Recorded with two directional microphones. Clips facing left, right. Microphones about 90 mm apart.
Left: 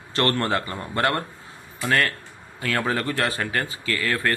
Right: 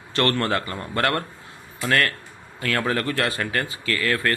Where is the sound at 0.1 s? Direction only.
30° left (ahead or behind).